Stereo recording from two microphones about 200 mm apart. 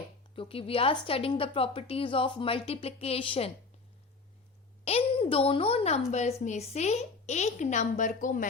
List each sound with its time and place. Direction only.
0.3 s a woman's voice: 30° left (ahead or behind)
4.9 s a woman's voice: 30° left (ahead or behind)